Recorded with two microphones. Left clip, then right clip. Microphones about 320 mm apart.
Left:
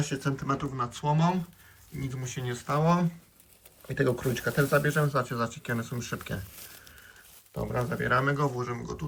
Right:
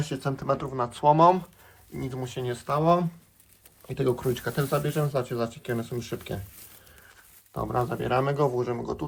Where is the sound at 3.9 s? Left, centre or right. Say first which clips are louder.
Right 1 dB; right.